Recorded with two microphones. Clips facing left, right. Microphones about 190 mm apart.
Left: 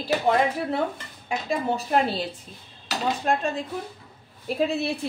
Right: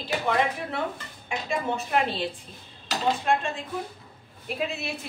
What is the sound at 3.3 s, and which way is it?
A woman's voice, 40° left (ahead or behind).